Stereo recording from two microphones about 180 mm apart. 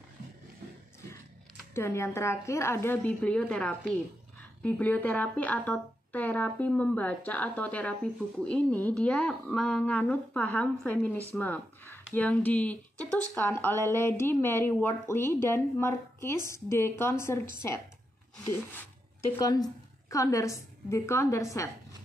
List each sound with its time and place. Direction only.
1.7 s a woman's voice: 15° left (ahead or behind)
19.4 s a woman's voice: 20° left (ahead or behind)